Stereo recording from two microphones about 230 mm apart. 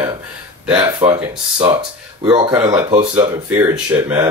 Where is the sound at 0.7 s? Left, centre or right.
Centre.